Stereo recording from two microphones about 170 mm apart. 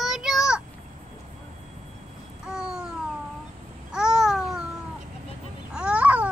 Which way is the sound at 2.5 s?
5° right (ahead or behind).